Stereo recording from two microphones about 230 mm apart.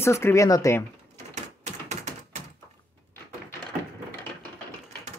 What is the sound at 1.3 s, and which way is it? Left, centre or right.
Typewriter, right.